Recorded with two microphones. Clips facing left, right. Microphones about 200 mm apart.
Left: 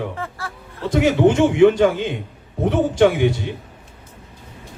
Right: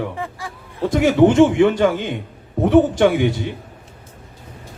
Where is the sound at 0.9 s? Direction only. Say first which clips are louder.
Right 3 dB; 45° right (ahead or behind).